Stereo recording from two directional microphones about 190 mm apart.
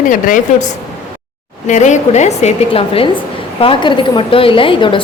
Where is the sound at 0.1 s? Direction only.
45° left (ahead or behind).